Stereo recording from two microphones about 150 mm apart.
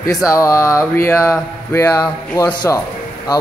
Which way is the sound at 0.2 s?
20° left (ahead or behind).